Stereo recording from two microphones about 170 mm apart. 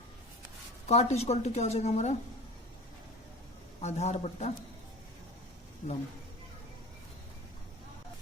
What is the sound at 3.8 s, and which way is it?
Speech, 40° left (ahead or behind).